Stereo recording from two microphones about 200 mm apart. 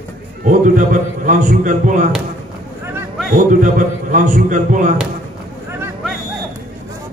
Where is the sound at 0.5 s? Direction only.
40° right (ahead or behind).